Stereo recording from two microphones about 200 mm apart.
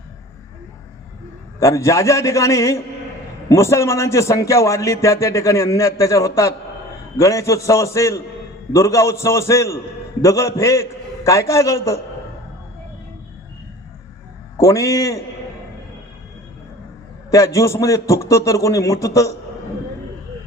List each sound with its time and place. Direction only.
1.5 s a man's voice: 15° left (ahead or behind)
14.6 s a man's voice: 15° left (ahead or behind)
17.3 s a man's voice: 15° left (ahead or behind)